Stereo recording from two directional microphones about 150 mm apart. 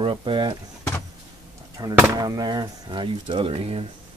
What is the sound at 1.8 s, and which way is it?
Speech, 20° right (ahead or behind).